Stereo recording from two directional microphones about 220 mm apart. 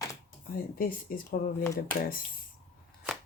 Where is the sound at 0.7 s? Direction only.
40° left (ahead or behind).